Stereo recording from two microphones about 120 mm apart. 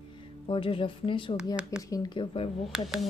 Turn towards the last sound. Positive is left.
turn(degrees=0)  # may be behind; listen again after turning